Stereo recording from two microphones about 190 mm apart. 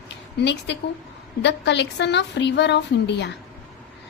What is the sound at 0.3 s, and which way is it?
A woman's voice, 65° left (ahead or behind).